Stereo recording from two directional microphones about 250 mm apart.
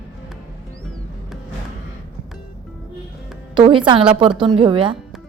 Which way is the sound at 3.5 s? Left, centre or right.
Centre.